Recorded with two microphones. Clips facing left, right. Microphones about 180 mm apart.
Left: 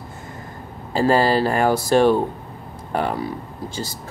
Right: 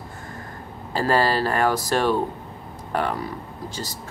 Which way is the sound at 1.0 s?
25° left (ahead or behind).